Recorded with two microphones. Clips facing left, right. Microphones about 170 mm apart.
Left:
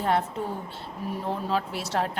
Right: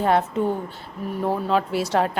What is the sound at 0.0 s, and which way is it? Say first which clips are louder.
Speech: right 5 dB; 90° right.